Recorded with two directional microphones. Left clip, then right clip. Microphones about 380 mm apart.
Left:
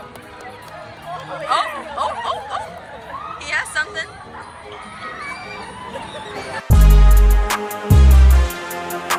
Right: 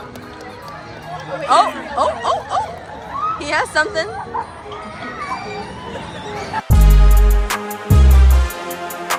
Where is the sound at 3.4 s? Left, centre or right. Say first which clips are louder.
Right 3 dB; centre.